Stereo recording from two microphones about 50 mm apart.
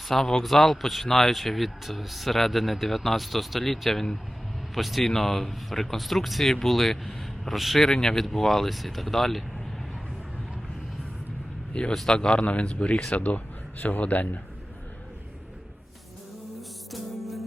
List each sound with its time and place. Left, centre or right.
0.1 s speech: centre
11.7 s speech: left
16.6 s music: centre